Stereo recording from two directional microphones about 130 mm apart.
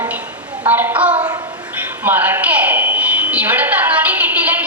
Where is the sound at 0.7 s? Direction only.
10° right (ahead or behind).